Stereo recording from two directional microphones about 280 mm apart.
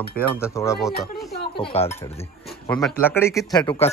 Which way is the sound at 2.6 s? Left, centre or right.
Centre.